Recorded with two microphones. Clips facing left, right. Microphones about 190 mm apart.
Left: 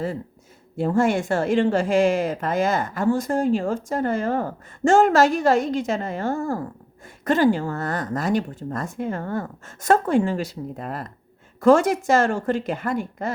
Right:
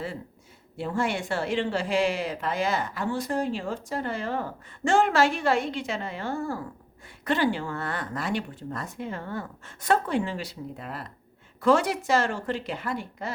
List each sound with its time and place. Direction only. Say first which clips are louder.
0.8 s a woman's voice: left 8 dB; 45° left (ahead or behind)